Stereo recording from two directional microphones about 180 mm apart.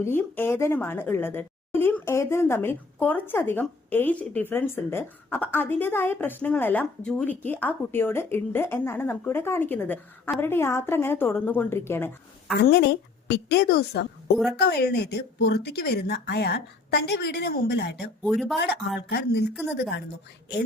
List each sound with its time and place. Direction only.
0.0 s a woman's voice: 15° left (ahead or behind)
12.5 s a woman's voice: 70° left (ahead or behind)
18.3 s speech: centre (ahead or behind)
18.9 s a woman's voice: 65° left (ahead or behind)